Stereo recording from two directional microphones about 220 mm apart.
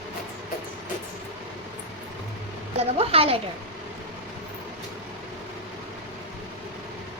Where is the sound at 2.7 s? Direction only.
25° right (ahead or behind).